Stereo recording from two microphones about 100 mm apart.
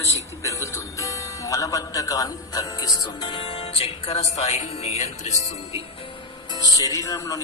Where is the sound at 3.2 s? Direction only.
60° left (ahead or behind); by 4.9 s 90° left.